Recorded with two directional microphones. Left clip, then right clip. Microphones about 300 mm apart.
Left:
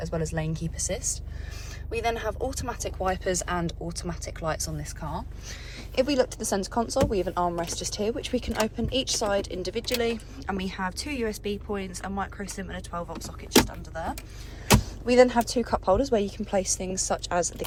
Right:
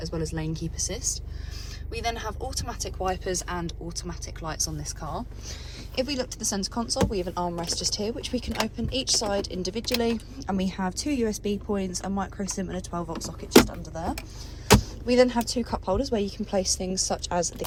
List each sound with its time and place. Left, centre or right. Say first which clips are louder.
0.0 s speech: left 1 dB; centre
6.0 s speech: left 5 dB; centre
13.5 s speech: right 4 dB; centre
13.9 s speech: left 1 dB; centre
14.7 s speech: right 1 dB; centre